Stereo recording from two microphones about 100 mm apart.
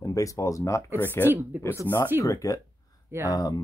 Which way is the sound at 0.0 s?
35° left (ahead or behind).